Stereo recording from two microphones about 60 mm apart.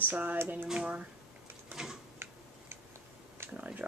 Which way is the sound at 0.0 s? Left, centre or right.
Right.